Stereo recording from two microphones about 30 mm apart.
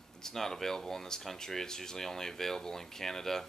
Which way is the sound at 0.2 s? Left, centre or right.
Centre.